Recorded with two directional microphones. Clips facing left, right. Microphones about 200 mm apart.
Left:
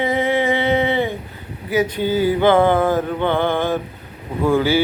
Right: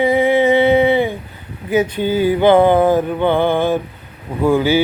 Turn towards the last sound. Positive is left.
turn(degrees=-15)  # may be behind; listen again after turning